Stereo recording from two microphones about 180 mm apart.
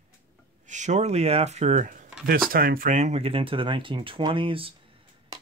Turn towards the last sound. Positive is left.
turn(degrees=-30)  # may be behind; listen again after turning